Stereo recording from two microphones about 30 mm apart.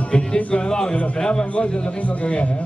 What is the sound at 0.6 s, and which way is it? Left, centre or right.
Speech, left.